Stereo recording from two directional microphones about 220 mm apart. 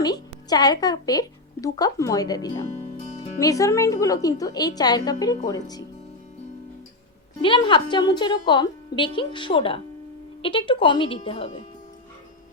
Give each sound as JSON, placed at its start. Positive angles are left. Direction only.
{"t": 0.0, "sound": "a woman's voice", "side_deg": 15}
{"t": 7.4, "sound": "a woman's voice", "side_deg": 20}